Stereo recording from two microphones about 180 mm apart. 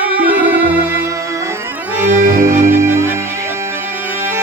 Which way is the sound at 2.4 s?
15° right (ahead or behind).